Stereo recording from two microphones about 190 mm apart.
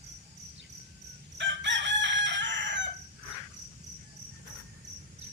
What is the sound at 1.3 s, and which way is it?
Chicken, 70° right (ahead or behind).